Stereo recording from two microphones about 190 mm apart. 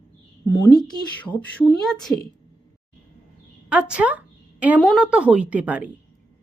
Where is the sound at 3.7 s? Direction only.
5° right (ahead or behind).